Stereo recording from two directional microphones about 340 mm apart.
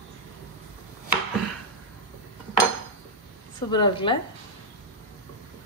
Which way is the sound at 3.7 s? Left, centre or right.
Centre.